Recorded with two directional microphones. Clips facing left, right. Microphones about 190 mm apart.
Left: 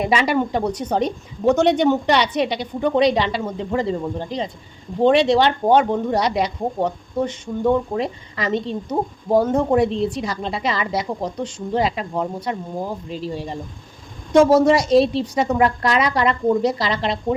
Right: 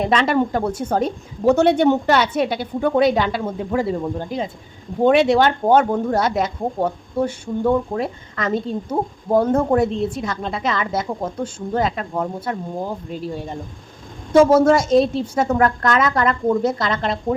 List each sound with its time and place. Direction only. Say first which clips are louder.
0.0 s speech: right 1 dB; 5° left (ahead or behind)
0.3 s a woman's voice: right 1 dB; 5° right (ahead or behind)